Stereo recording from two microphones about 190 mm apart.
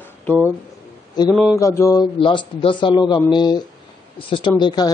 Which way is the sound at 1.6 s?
15° left (ahead or behind).